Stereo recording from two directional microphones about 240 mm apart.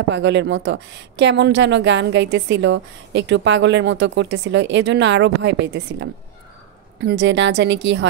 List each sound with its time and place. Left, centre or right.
0.1 s a woman's voice: right